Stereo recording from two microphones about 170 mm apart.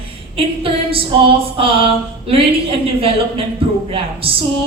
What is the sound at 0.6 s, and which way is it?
A woman's voice, 35° right (ahead or behind).